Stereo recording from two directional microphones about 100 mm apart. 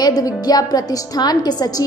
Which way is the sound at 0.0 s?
40° left (ahead or behind).